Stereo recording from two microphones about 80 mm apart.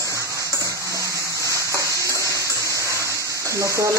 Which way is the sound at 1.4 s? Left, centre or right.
Right.